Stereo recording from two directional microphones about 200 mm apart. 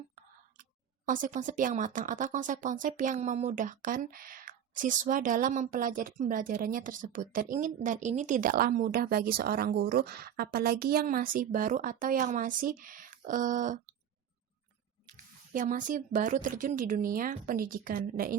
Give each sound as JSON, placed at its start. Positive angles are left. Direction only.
{"t": 1.0, "sound": "a woman's voice", "side_deg": -40}
{"t": 15.0, "sound": "a woman's voice", "side_deg": -40}